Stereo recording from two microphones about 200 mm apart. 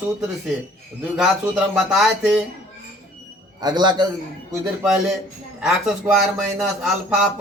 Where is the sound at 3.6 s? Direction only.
20° right (ahead or behind).